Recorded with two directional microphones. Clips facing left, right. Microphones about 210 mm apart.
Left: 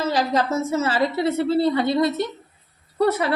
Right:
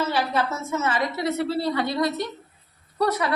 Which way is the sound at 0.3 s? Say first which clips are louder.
Left 5 dB; 35° left (ahead or behind).